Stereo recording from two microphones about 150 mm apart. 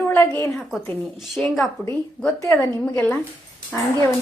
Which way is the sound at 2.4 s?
20° left (ahead or behind).